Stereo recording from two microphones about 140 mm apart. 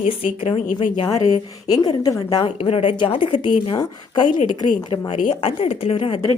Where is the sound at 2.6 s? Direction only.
45° left (ahead or behind).